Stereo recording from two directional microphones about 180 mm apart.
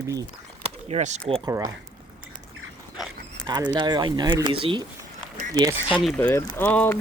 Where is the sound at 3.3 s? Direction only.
25° right (ahead or behind).